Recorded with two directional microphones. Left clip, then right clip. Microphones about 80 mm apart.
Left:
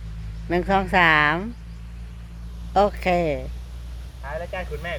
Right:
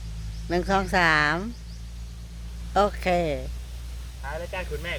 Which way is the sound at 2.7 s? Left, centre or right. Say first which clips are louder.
Left 3 dB; centre.